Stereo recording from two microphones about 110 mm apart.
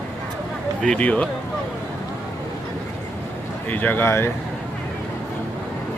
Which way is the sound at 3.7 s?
15° left (ahead or behind).